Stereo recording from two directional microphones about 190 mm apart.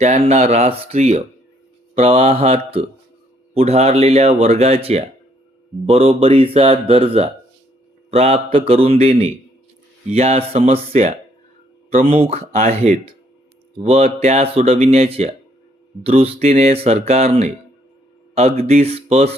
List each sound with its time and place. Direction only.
0.0 s speech: 35° right (ahead or behind)
11.9 s speech: 45° right (ahead or behind)
12.1 s speech: 30° right (ahead or behind)
12.5 s speech: 45° right (ahead or behind)
13.7 s speech: 35° right (ahead or behind)
18.6 s speech: 30° right (ahead or behind)